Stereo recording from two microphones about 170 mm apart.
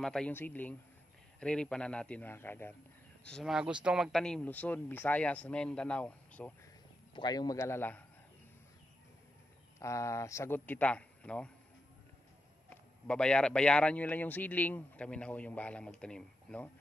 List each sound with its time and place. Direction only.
0.0 s speech: 5° left (ahead or behind)
3.3 s speech: centre (ahead or behind)
7.2 s speech: 25° left (ahead or behind)
9.8 s speech: 15° left (ahead or behind)
12.6 s speech: 5° left (ahead or behind)